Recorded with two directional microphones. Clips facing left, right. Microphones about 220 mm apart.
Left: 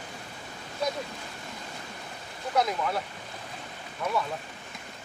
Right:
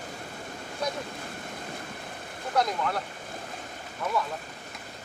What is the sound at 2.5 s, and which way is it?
Speech, 5° left (ahead or behind).